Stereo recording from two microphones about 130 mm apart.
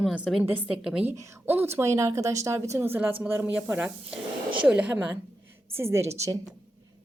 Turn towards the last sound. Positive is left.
turn(degrees=-20)  # may be behind; listen again after turning